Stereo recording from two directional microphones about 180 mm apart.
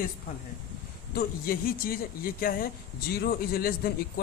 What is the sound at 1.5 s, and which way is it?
A man's voice, 55° left (ahead or behind).